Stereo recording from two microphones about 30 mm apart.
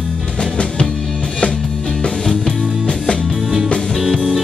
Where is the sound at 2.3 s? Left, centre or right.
Left.